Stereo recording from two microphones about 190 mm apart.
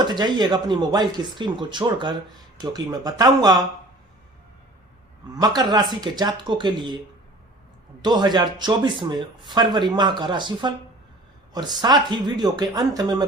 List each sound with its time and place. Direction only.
0.0 s speech: 20° right (ahead or behind)
5.3 s speech: 20° right (ahead or behind)
8.0 s speech: 20° right (ahead or behind)